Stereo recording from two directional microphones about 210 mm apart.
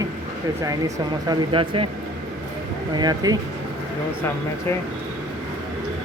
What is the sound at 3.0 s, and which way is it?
Speech, 20° right (ahead or behind).